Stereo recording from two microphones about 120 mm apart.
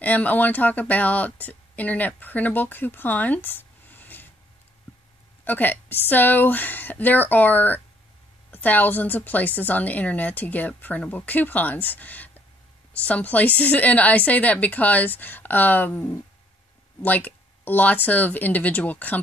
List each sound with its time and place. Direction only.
0.0 s speech: 15° left (ahead or behind)
5.4 s a woman's voice: 15° left (ahead or behind)